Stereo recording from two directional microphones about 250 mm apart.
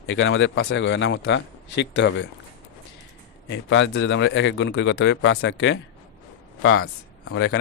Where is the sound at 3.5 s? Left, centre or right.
Left.